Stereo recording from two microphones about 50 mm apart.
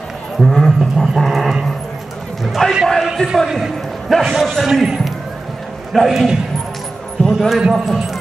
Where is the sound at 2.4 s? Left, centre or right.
Centre.